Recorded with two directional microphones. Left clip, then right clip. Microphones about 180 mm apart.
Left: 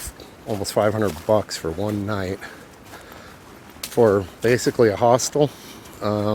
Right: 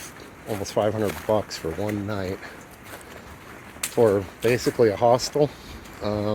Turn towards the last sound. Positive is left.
turn(degrees=40)  # may be behind; listen again after turning